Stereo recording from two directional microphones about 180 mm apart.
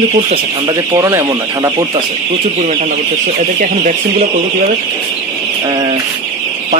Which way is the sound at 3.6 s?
45° right (ahead or behind).